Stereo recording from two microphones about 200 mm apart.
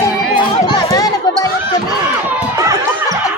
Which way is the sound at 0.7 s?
20° left (ahead or behind).